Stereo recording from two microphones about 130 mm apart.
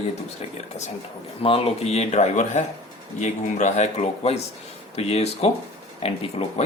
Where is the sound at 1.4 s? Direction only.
50° left (ahead or behind).